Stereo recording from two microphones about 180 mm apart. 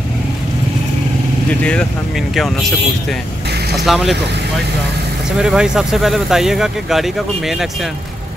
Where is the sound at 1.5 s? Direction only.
5° left (ahead or behind).